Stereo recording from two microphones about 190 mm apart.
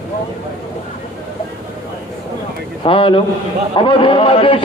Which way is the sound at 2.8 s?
25° left (ahead or behind).